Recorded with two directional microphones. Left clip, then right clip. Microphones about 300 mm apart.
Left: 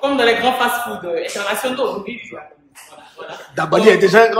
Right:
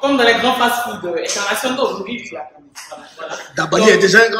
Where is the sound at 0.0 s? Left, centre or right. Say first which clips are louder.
Right 1 dB; centre.